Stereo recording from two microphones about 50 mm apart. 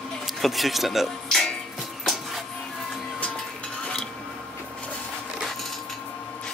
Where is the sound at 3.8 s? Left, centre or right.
Centre.